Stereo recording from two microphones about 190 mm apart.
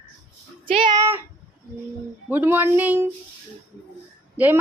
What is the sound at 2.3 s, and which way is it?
Speech, 10° right (ahead or behind).